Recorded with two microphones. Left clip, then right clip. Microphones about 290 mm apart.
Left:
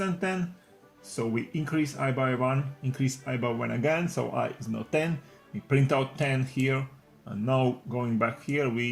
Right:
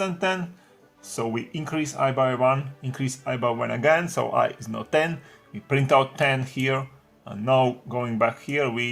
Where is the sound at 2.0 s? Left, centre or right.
Right.